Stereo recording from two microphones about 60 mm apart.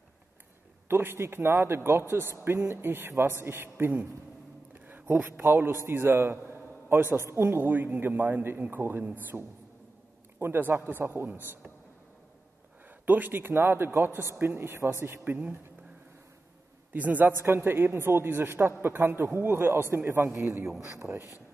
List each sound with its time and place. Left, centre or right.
0.8 s speech: right
5.3 s speech: right
6.5 s a sound: right
7.2 s speech: right
9.3 s a man's voice: centre
10.4 s speech: right
12.8 s speech: right
16.9 s a man's voice: right
17.4 s a man's voice: right